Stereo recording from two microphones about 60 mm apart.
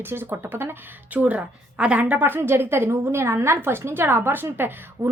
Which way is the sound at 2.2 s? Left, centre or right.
Right.